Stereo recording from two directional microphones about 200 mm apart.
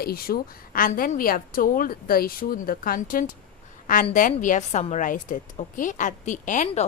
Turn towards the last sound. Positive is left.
turn(degrees=35)  # may be behind; listen again after turning